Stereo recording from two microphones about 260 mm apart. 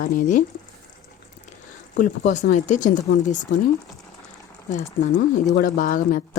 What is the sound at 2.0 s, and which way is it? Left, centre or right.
Speech, left.